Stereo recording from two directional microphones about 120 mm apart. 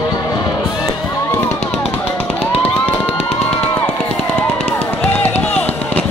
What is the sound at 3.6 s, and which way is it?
Music, 15° left (ahead or behind).